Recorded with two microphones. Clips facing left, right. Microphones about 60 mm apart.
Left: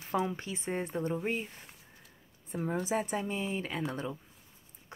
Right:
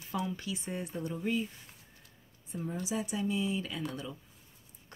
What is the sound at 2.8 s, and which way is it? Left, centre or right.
Speech, left.